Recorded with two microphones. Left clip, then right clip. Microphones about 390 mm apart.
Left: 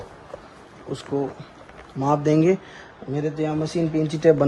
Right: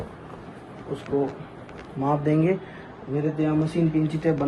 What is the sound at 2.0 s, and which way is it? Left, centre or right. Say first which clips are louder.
A man's voice: left 4 dB; left.